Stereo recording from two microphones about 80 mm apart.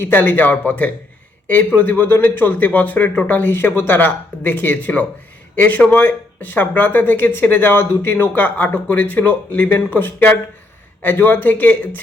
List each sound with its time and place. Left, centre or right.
0.0 s speech: left